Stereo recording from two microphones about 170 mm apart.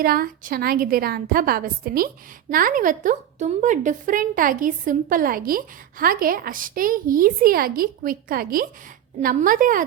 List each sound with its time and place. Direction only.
0.0 s a woman's voice: 60° right (ahead or behind)